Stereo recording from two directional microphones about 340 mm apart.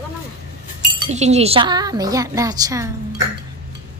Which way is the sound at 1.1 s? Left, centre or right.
Centre.